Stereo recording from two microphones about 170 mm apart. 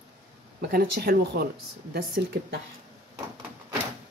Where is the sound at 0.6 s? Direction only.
65° right (ahead or behind).